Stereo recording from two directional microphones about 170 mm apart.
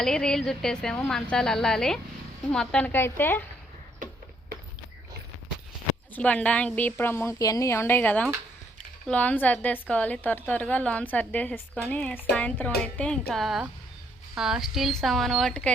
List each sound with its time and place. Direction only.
0.0 s a woman's voice: 5° left (ahead or behind)
4.0 s a sound: 50° right (ahead or behind)
6.1 s a woman's voice: 10° left (ahead or behind)